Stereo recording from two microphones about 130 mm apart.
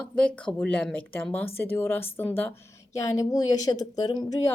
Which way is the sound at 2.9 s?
25° left (ahead or behind).